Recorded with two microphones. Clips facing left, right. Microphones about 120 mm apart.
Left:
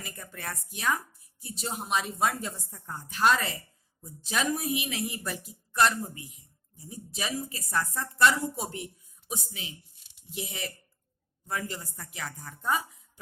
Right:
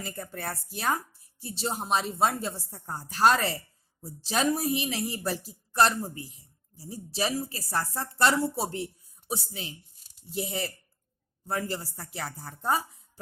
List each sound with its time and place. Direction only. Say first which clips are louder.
0.0 s a woman's voice: right 5 dB; 30° right (ahead or behind)